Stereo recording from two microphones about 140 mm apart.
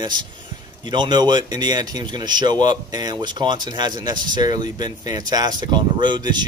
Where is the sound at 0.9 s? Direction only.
30° right (ahead or behind).